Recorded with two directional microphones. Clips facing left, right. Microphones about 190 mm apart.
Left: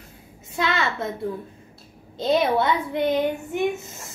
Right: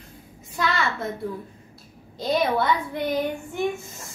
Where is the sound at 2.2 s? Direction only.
25° left (ahead or behind).